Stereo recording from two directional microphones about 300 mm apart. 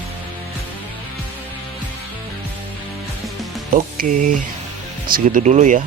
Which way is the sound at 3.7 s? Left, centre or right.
Right.